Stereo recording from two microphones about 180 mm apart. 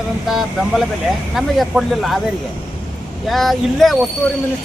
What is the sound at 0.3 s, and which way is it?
Speech, centre (ahead or behind).